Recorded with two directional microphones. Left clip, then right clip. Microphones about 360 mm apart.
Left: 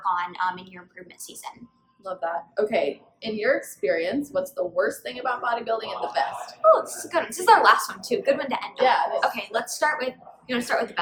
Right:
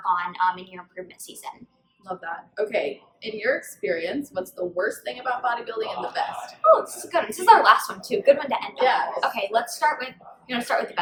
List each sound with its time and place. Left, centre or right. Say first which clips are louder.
0.0 s a woman's voice: right 2 dB; centre